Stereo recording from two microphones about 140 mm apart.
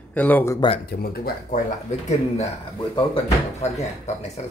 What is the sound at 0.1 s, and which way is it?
Speech, 10° left (ahead or behind).